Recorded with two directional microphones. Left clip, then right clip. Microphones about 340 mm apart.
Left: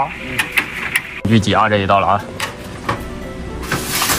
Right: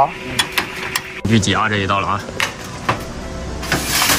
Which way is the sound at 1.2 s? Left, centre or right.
Centre.